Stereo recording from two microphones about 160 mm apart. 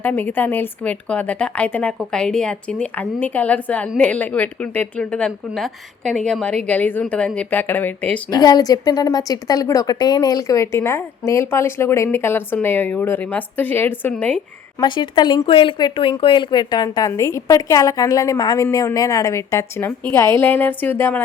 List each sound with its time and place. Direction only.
0.0 s a woman's voice: 10° left (ahead or behind)
8.3 s a woman's voice: 25° left (ahead or behind); by 14.4 s 5° left (ahead or behind)
14.8 s speech: 30° left (ahead or behind); by 21.2 s 15° left (ahead or behind)